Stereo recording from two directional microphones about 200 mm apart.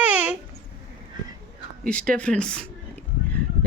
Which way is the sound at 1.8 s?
5° left (ahead or behind).